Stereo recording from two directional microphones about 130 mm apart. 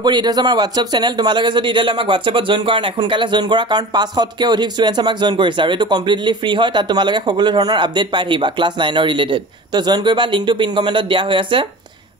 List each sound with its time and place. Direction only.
0.0 s speech: 35° right (ahead or behind)